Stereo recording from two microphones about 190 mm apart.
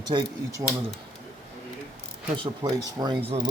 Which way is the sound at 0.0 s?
20° right (ahead or behind).